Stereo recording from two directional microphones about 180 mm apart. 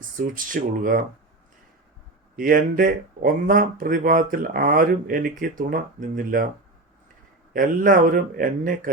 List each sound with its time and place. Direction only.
0.2 s speech: 50° right (ahead or behind)
2.3 s speech: 50° right (ahead or behind)
7.5 s speech: 50° right (ahead or behind)